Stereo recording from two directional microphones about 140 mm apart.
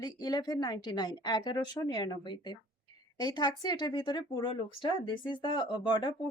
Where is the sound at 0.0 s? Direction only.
30° left (ahead or behind).